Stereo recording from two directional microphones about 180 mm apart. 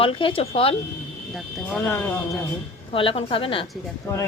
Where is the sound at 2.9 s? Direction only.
30° left (ahead or behind).